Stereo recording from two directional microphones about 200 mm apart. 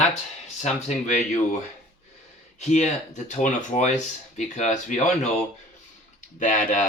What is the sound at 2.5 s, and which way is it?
Speech, 35° left (ahead or behind).